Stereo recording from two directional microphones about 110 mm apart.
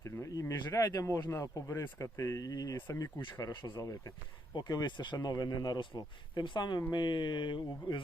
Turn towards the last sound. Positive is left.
turn(degrees=45)  # may be behind; listen again after turning